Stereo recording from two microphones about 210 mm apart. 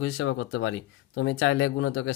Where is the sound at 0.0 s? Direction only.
65° left (ahead or behind).